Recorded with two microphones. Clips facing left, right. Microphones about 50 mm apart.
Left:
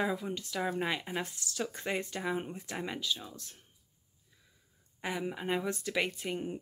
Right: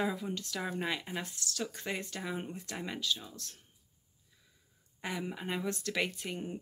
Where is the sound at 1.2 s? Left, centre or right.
Left.